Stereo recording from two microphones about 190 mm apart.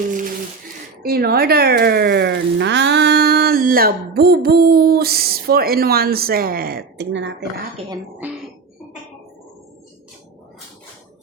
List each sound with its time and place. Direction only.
1.0 s speech: 55° right (ahead or behind)
8.2 s throat clearing: 10° right (ahead or behind)